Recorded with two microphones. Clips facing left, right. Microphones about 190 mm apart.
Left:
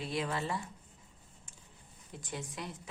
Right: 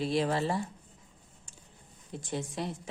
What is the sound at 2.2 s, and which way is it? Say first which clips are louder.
Speech: right 7 dB; 30° right (ahead or behind).